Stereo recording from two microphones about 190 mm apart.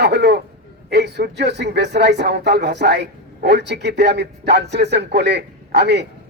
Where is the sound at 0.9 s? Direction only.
60° right (ahead or behind).